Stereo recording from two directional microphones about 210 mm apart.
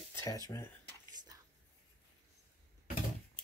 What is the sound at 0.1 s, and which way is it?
Speech, 15° left (ahead or behind).